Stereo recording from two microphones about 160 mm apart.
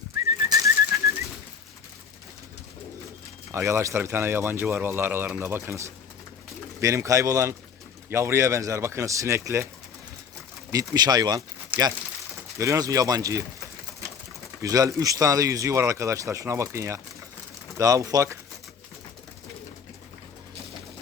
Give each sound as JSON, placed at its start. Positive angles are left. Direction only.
{"t": 0.4, "sound": "bird", "side_deg": -20}
{"t": 3.5, "sound": "speech", "side_deg": -15}
{"t": 10.7, "sound": "speech", "side_deg": -25}
{"t": 12.5, "sound": "speech", "side_deg": -20}
{"t": 14.6, "sound": "speech", "side_deg": -20}